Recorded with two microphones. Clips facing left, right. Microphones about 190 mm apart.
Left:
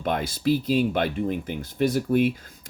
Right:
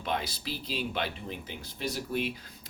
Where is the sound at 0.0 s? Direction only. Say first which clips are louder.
Left 9 dB; 50° left (ahead or behind).